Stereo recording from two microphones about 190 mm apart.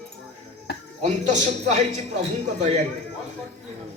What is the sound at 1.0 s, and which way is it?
Speech, 35° right (ahead or behind).